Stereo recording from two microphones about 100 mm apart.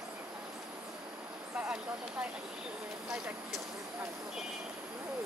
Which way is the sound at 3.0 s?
Centre (ahead or behind).